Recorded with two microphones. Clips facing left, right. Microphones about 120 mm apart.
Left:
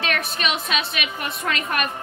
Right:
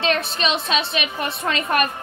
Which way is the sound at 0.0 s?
25° right (ahead or behind).